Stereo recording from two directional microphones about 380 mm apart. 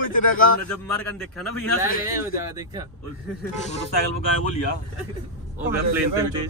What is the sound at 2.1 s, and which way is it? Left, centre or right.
Speech, centre.